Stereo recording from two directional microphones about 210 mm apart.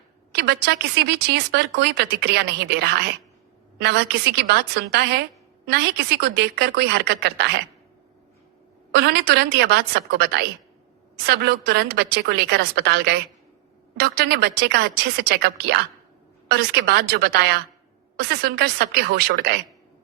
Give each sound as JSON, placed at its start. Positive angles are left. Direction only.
{"t": 0.3, "sound": "speech", "side_deg": -50}
{"t": 9.0, "sound": "speech", "side_deg": -50}